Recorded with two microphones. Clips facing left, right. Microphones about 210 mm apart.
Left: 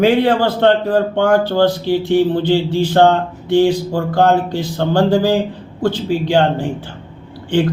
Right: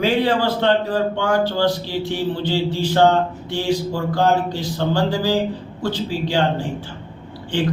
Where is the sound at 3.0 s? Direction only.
55° left (ahead or behind).